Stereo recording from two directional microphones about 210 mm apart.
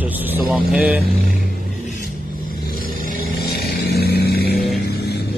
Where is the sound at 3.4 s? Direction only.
50° left (ahead or behind).